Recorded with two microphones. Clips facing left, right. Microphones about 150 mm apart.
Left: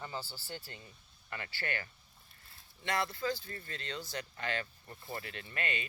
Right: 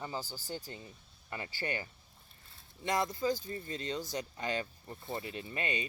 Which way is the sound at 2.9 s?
20° right (ahead or behind).